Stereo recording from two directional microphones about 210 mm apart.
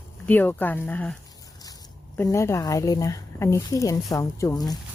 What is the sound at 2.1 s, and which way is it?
Speech, 15° left (ahead or behind).